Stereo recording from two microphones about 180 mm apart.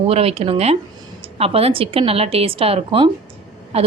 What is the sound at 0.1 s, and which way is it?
Speech, 35° right (ahead or behind).